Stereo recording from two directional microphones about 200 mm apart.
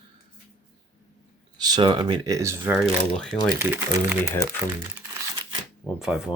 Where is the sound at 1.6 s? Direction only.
20° right (ahead or behind).